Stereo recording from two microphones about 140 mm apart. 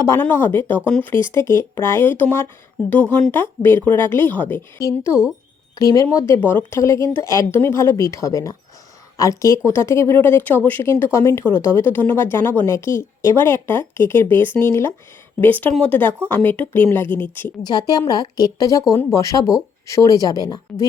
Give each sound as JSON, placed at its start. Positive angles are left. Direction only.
{"t": 0.0, "sound": "speech", "side_deg": 15}
{"t": 1.2, "sound": "speech", "side_deg": 20}
{"t": 17.6, "sound": "speech", "side_deg": 30}